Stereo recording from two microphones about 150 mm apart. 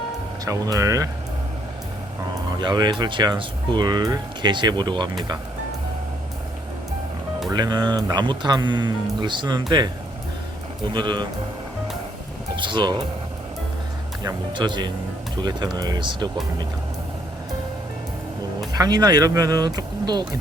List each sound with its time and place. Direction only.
0.4 s speech: 20° right (ahead or behind)
2.6 s speech: 30° right (ahead or behind)
7.5 s speech: 25° right (ahead or behind)
10.9 s speech: 30° right (ahead or behind)
12.5 s speech: 30° right (ahead or behind)
14.3 s speech: 30° right (ahead or behind)
18.7 s speech: 25° right (ahead or behind)